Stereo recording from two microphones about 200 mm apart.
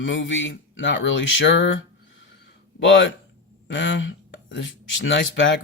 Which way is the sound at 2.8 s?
65° left (ahead or behind).